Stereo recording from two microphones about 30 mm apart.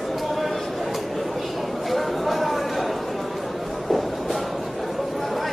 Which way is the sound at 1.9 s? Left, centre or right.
Centre.